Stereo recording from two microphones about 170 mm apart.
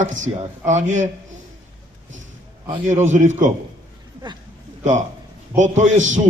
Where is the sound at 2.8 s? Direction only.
45° right (ahead or behind).